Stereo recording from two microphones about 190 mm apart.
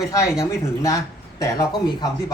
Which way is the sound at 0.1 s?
15° left (ahead or behind).